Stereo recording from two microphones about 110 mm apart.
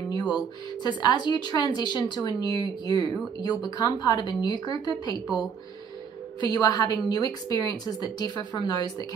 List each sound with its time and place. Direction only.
0.1 s music: 40° left (ahead or behind)
0.8 s a woman's voice: 40° left (ahead or behind)
6.5 s a woman's voice: 35° left (ahead or behind)